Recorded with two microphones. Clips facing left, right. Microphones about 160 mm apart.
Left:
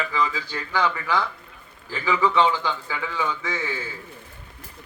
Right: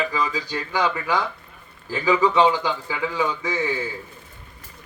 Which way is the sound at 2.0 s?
40° right (ahead or behind).